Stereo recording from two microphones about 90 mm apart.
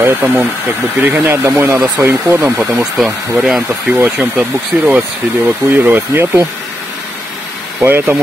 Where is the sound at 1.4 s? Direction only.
25° right (ahead or behind).